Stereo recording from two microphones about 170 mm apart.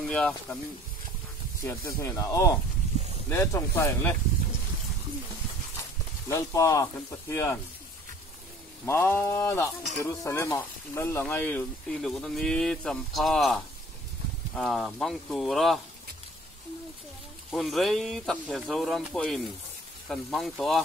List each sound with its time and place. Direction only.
0.1 s speech: 5° left (ahead or behind)
1.6 s speech: 15° left (ahead or behind)
5.8 s speech: 20° left (ahead or behind)
8.8 s speech: 15° left (ahead or behind)
17.5 s speech: centre (ahead or behind)